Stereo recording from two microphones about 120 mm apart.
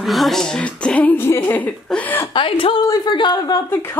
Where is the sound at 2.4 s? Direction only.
50° left (ahead or behind).